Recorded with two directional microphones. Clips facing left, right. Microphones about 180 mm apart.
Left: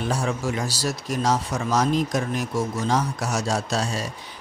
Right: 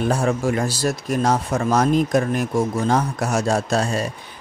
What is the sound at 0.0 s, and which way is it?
Speech, 55° right (ahead or behind).